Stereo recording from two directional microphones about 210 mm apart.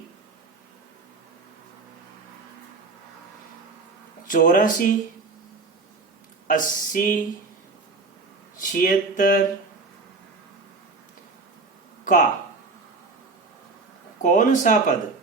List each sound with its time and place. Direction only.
4.3 s speech: 40° left (ahead or behind)
6.5 s speech: 40° left (ahead or behind)
8.5 s speech: 40° left (ahead or behind)
12.0 s speech: 35° left (ahead or behind)
14.2 s speech: 40° left (ahead or behind)